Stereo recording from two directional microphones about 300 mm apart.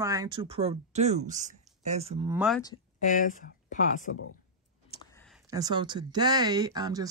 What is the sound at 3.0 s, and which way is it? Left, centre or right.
Speech, left.